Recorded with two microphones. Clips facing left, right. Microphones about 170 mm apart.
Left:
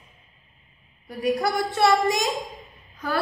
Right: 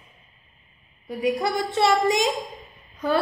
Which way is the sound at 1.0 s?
20° right (ahead or behind).